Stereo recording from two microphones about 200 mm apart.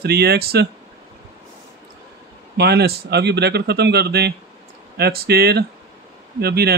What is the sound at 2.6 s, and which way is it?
Speech, 55° right (ahead or behind).